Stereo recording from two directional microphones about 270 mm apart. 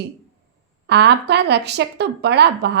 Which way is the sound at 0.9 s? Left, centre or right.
Right.